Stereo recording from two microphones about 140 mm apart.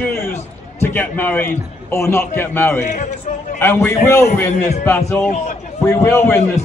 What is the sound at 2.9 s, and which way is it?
Speech, 60° left (ahead or behind).